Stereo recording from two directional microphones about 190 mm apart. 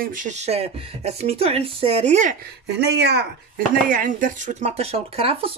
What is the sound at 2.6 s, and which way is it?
Speech, 60° right (ahead or behind).